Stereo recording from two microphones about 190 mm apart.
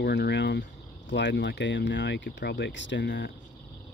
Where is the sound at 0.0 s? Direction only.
60° left (ahead or behind).